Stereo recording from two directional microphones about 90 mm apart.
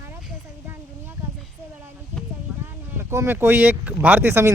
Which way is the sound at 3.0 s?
25° right (ahead or behind).